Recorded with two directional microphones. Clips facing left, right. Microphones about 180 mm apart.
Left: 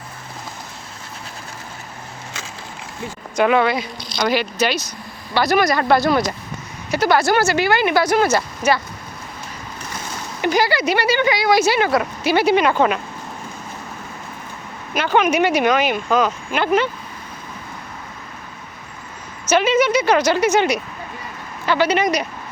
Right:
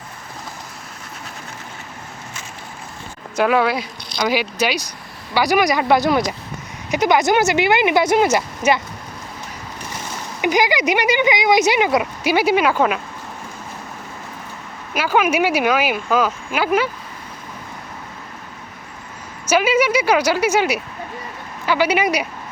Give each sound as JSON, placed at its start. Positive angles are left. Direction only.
{"t": 3.3, "sound": "speech", "side_deg": -5}
{"t": 10.4, "sound": "speech", "side_deg": -15}
{"t": 14.9, "sound": "speech", "side_deg": -5}
{"t": 19.5, "sound": "speech", "side_deg": -10}